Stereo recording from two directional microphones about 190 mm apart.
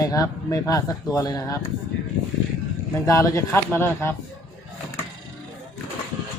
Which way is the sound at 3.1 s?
15° left (ahead or behind).